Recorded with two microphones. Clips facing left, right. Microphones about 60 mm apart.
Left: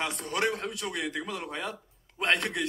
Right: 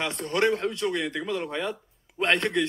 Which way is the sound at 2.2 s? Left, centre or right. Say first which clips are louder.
Right 3 dB; right.